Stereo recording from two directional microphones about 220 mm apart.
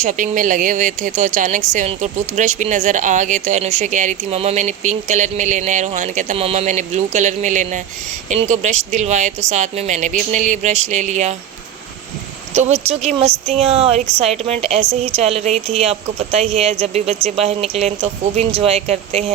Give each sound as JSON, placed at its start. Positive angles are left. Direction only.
{"t": 0.0, "sound": "speech", "side_deg": -35}
{"t": 12.5, "sound": "speech", "side_deg": -30}